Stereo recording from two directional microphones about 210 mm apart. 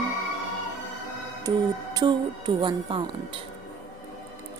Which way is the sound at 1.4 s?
20° right (ahead or behind).